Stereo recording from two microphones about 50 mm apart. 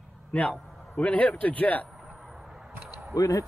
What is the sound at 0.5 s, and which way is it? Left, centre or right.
A man's voice, left.